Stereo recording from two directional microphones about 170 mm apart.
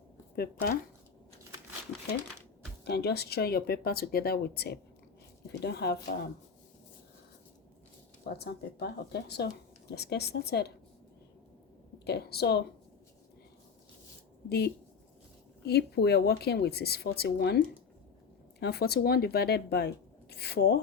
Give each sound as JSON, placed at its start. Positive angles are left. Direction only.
{"t": 0.3, "sound": "speech", "side_deg": 60}
{"t": 2.8, "sound": "speech", "side_deg": 75}
{"t": 8.2, "sound": "speech", "side_deg": 70}
{"t": 12.0, "sound": "speech", "side_deg": 70}
{"t": 15.6, "sound": "speech", "side_deg": 70}
{"t": 18.6, "sound": "speech", "side_deg": 70}